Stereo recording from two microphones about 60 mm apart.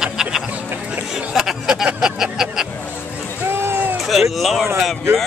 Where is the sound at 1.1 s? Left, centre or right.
Centre.